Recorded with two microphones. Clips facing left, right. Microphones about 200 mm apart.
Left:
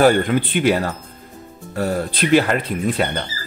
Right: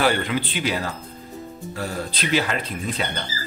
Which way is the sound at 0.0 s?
45° left (ahead or behind).